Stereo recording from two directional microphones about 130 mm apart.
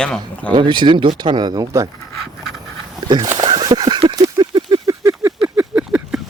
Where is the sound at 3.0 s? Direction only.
35° right (ahead or behind).